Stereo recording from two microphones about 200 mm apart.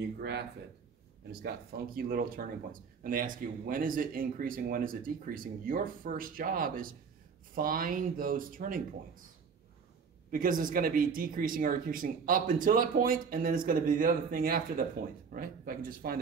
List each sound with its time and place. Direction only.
0.2 s speech: 55° right (ahead or behind)
10.3 s speech: 45° right (ahead or behind)